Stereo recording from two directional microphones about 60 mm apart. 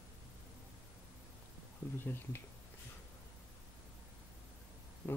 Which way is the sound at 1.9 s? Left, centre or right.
Left.